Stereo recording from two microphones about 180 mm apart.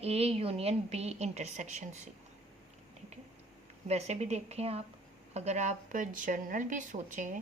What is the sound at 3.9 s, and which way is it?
A woman's voice, 35° right (ahead or behind).